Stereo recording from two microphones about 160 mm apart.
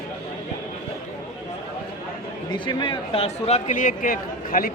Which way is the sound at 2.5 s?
30° left (ahead or behind).